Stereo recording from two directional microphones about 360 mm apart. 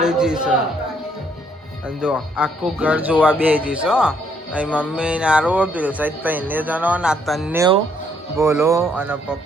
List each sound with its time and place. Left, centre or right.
0.0 s speech: centre
2.0 s speech: centre